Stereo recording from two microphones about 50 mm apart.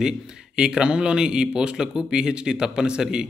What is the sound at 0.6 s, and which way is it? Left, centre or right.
A man's voice, centre.